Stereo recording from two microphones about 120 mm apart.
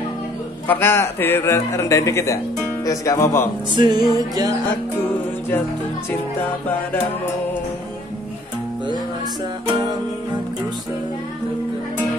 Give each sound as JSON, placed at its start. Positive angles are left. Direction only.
{"t": 0.7, "sound": "speech", "side_deg": 20}
{"t": 3.7, "sound": "music", "side_deg": -35}